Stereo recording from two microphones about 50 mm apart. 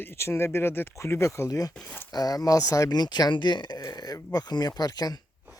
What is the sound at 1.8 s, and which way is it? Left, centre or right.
Speech, left.